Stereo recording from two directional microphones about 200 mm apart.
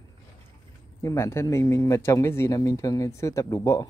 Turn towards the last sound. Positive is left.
turn(degrees=15)  # may be behind; listen again after turning